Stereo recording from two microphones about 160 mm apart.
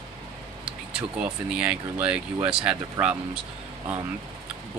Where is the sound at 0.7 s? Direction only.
5° right (ahead or behind).